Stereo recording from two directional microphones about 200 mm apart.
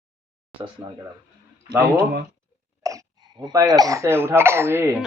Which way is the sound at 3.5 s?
20° right (ahead or behind).